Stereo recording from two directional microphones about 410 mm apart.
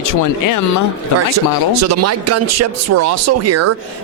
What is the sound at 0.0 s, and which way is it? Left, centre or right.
Speech, left.